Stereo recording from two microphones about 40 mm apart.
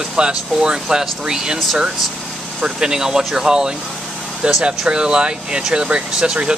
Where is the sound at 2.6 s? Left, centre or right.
Centre.